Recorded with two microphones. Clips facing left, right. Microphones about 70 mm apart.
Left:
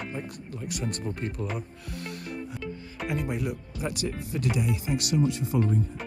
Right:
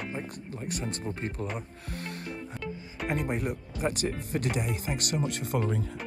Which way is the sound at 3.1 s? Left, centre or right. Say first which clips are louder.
Even; right.